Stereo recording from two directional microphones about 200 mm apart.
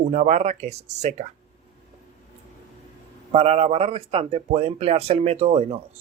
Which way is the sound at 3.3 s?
30° right (ahead or behind).